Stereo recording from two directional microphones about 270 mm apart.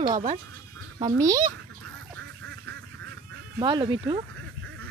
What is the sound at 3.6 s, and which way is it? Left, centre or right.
Speech, centre.